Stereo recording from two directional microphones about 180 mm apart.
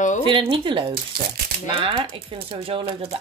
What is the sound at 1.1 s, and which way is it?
Speech, 60° right (ahead or behind).